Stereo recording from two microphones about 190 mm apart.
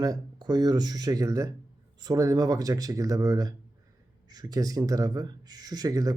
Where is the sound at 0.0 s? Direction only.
20° right (ahead or behind).